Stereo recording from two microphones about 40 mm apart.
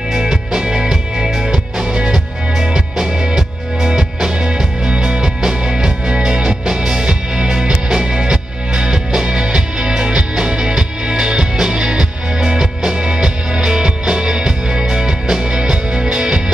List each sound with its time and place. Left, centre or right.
0.1 s music: centre